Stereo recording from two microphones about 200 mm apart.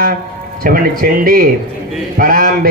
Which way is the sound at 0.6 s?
45° right (ahead or behind).